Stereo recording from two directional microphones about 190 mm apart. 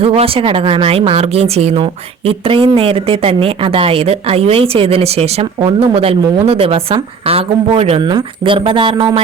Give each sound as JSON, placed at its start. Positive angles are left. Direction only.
{"t": 0.0, "sound": "speech", "side_deg": -30}